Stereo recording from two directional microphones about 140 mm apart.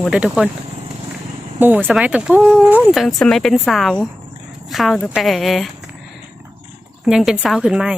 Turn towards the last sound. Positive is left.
turn(degrees=-5)  # may be behind; listen again after turning